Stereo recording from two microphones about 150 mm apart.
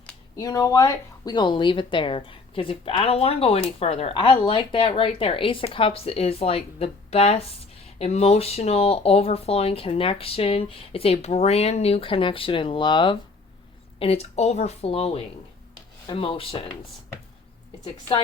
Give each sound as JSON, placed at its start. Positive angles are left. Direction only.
{"t": 0.3, "sound": "speech", "side_deg": 25}
{"t": 14.0, "sound": "speech", "side_deg": 45}